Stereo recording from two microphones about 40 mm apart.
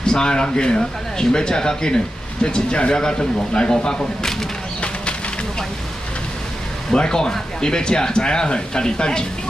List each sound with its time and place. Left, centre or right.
0.0 s speech: centre
6.9 s speech: centre